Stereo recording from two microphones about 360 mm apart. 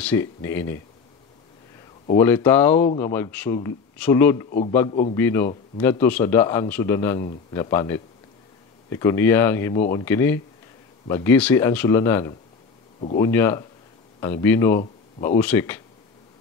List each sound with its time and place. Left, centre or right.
0.0 s speech: centre
2.1 s speech: centre